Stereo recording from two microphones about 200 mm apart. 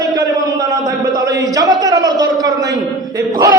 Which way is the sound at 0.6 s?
20° right (ahead or behind).